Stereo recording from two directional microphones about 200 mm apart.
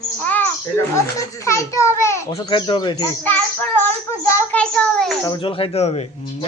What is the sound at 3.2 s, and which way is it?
A child's voice, 10° left (ahead or behind).